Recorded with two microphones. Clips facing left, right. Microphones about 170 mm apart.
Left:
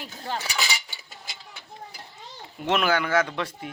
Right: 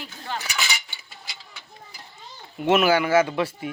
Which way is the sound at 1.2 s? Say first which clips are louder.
Left 1 dB; 50° left (ahead or behind).